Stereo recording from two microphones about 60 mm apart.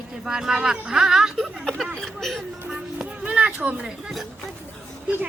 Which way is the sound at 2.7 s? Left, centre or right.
Centre.